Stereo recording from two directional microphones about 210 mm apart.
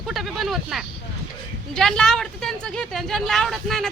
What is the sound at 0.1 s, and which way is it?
Speech, centre (ahead or behind).